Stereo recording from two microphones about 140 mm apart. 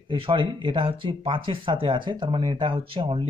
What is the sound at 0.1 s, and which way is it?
Speech, 40° right (ahead or behind).